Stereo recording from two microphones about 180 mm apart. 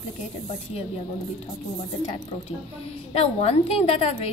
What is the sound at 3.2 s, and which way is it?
A woman's voice, 35° left (ahead or behind).